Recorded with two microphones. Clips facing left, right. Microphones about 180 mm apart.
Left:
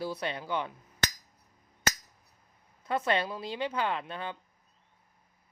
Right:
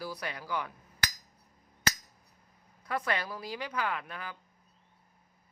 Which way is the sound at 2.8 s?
25° left (ahead or behind).